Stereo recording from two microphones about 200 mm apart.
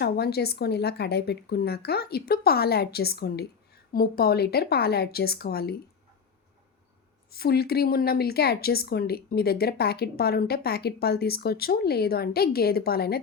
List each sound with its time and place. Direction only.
0.0 s a woman's voice: 55° left (ahead or behind)
7.3 s a woman's voice: 50° left (ahead or behind)